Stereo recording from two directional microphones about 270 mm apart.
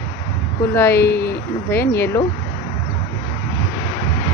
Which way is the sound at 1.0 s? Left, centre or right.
Left.